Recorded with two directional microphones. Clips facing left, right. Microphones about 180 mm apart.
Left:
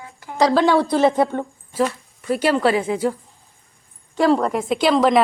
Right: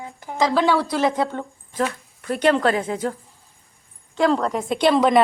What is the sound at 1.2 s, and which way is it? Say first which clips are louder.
Speech: left 4 dB; 15° left (ahead or behind).